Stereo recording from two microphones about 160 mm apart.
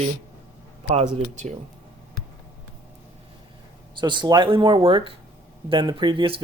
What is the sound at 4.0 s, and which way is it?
Speech, 30° right (ahead or behind).